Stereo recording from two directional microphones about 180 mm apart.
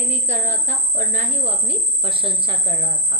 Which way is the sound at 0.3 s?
45° right (ahead or behind).